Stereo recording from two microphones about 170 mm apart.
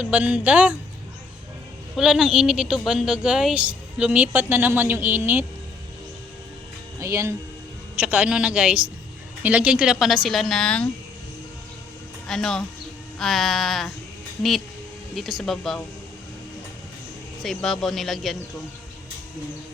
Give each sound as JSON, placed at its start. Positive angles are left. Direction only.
{"t": 0.0, "sound": "a woman's voice", "side_deg": -5}
{"t": 2.0, "sound": "a woman's voice", "side_deg": -5}
{"t": 7.0, "sound": "a woman's voice", "side_deg": -15}
{"t": 12.3, "sound": "speech", "side_deg": 5}
{"t": 15.1, "sound": "speech", "side_deg": 0}
{"t": 17.4, "sound": "speech", "side_deg": 0}